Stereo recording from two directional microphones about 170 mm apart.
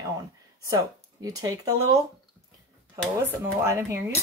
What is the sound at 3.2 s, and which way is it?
Speech, 15° right (ahead or behind).